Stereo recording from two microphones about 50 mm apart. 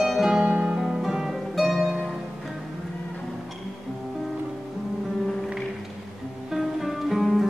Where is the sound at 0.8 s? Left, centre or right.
Centre.